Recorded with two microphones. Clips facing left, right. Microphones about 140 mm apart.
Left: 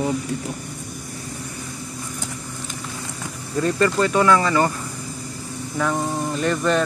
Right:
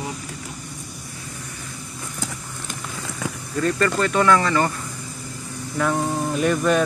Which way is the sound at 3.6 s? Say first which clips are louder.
Left 1 dB; 15° left (ahead or behind).